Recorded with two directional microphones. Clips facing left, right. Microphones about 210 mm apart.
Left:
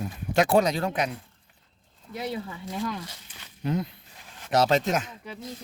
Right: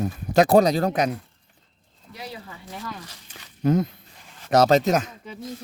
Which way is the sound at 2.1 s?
25° left (ahead or behind).